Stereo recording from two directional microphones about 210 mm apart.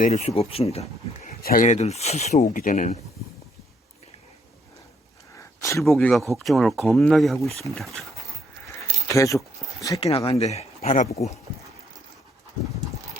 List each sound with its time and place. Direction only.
0.0 s speech: 30° left (ahead or behind)
5.5 s a sound: 15° left (ahead or behind)
5.8 s speech: centre (ahead or behind)
9.0 s speech: 15° left (ahead or behind)
10.0 s speech: 25° left (ahead or behind)